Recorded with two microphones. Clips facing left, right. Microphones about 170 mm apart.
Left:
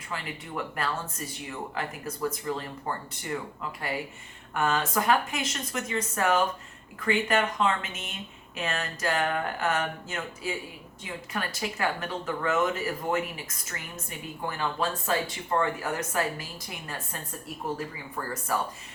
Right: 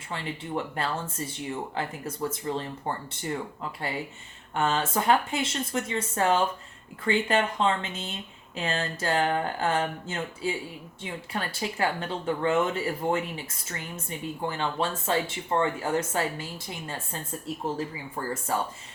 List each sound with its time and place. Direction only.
0.1 s speech: 30° right (ahead or behind)
4.5 s speech: 25° right (ahead or behind)
18.5 s speech: 25° right (ahead or behind)